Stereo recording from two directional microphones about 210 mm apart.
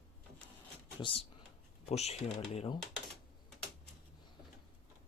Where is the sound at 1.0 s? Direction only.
25° left (ahead or behind).